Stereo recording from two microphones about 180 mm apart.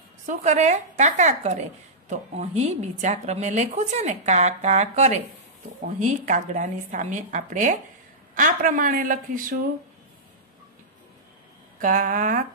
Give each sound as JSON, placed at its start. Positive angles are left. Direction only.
{"t": 0.3, "sound": "a woman's voice", "side_deg": -40}
{"t": 11.8, "sound": "a woman's voice", "side_deg": -50}